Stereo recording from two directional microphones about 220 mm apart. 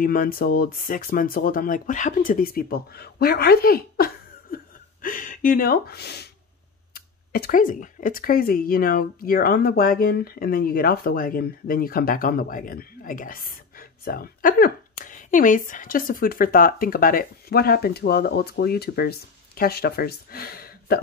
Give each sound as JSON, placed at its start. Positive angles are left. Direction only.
{"t": 0.0, "sound": "speech", "side_deg": 40}